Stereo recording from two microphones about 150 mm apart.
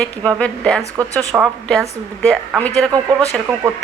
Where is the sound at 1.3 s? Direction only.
15° right (ahead or behind).